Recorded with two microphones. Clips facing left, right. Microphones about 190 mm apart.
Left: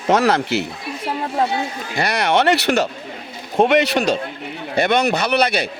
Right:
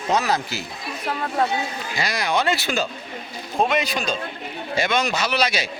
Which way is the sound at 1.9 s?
65° left (ahead or behind).